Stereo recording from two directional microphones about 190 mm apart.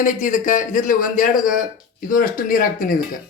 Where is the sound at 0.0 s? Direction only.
45° left (ahead or behind).